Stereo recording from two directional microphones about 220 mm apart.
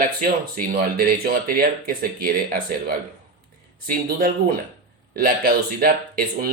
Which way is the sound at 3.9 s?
40° right (ahead or behind).